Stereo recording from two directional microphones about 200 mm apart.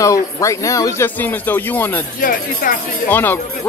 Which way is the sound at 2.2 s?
45° left (ahead or behind).